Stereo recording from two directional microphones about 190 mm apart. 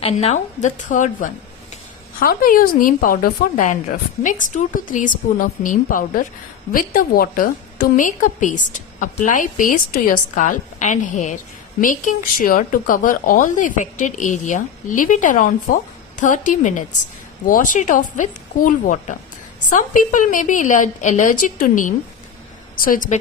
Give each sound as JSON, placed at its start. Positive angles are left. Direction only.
{"t": 0.0, "sound": "a woman's voice", "side_deg": 30}